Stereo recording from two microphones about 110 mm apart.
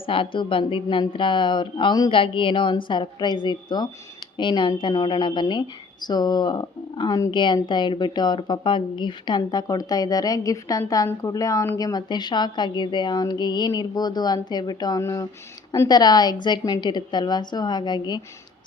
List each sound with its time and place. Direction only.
0.0 s a woman's voice: 50° left (ahead or behind)